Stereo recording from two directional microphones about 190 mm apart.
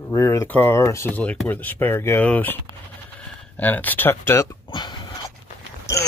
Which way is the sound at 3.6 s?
10° left (ahead or behind).